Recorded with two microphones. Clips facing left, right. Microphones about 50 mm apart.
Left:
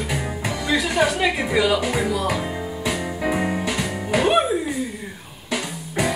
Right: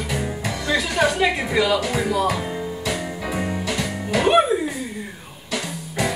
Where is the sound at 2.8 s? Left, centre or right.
Centre.